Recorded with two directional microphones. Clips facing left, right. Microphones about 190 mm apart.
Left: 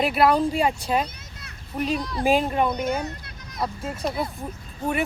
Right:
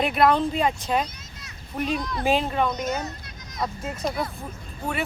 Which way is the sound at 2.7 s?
60° left (ahead or behind).